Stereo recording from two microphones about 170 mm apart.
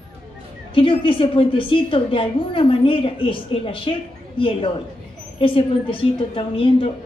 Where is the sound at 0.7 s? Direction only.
30° left (ahead or behind).